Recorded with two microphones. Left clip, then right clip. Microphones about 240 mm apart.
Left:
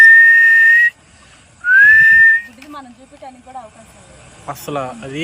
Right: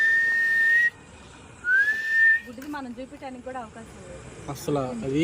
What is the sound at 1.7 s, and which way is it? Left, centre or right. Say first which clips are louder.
Whistling: left 16 dB; centre.